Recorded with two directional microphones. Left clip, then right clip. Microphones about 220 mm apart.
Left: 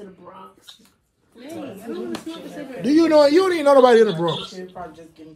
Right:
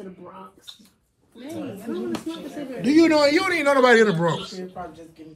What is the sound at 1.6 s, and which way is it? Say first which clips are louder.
Speech: even; 20° right (ahead or behind).